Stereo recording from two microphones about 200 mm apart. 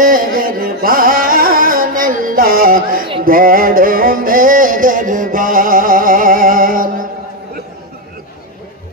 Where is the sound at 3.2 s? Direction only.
45° right (ahead or behind).